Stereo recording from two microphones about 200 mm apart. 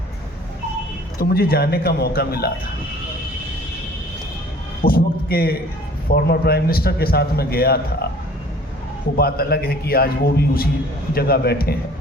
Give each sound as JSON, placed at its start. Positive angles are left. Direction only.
{"t": 1.2, "sound": "a man's voice", "side_deg": 50}
{"t": 4.8, "sound": "a man's voice", "side_deg": 50}
{"t": 9.1, "sound": "a man's voice", "side_deg": 50}